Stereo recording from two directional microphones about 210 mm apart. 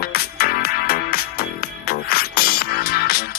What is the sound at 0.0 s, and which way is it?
Music, 45° left (ahead or behind).